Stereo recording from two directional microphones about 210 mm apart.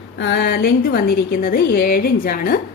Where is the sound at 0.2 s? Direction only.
55° left (ahead or behind).